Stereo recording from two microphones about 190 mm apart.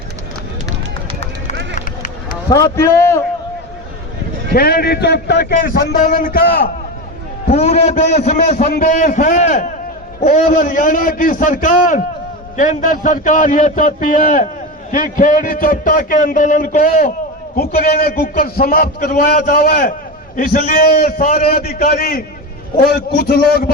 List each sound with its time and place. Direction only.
1.7 s run: 40° left (ahead or behind)
2.5 s a man's voice: 20° left (ahead or behind)
4.5 s a man's voice: 55° left (ahead or behind)
7.4 s a man's voice: 35° left (ahead or behind)
17.6 s a man's voice: 50° left (ahead or behind)